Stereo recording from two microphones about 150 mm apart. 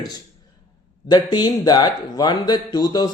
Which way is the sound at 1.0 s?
30° left (ahead or behind).